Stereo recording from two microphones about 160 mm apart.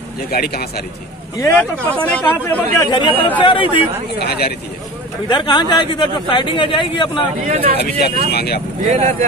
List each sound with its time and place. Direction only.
0.3 s speech: 75° left (ahead or behind)
1.4 s speech: 10° left (ahead or behind)
2.9 s speech: 30° left (ahead or behind)
4.2 s speech: 80° left
5.3 s speech: 30° left (ahead or behind)
7.4 s speech: 60° right (ahead or behind)
7.7 s speech: 90° left
8.3 s speech: 80° left
8.8 s speech: 50° right (ahead or behind)